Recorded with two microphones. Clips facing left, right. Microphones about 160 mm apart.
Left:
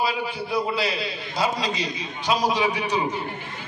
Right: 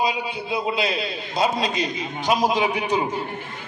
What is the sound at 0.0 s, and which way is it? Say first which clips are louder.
A man's voice: right 1 dB; 20° right (ahead or behind).